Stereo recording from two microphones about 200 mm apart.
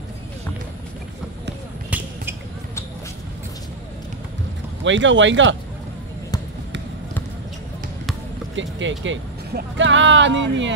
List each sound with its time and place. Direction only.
4.8 s speech: 70° right (ahead or behind)
8.5 s speech: 70° right (ahead or behind)